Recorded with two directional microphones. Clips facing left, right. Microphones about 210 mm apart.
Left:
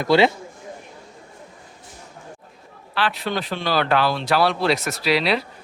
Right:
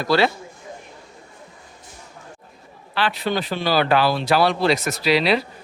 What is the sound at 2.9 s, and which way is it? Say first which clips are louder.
Speech: right 1 dB; centre (ahead or behind).